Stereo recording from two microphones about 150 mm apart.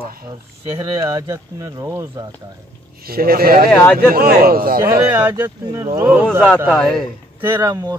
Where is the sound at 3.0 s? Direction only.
85° right.